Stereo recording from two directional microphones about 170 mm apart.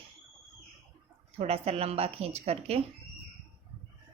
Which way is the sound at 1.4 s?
35° right (ahead or behind).